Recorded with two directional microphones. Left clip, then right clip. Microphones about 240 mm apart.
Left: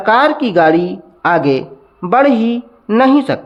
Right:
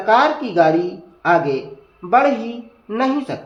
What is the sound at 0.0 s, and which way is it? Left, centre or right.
Speech, left.